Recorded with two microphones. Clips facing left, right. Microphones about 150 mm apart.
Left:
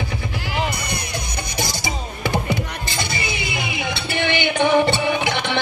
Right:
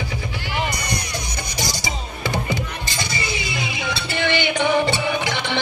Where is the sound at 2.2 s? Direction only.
55° left (ahead or behind).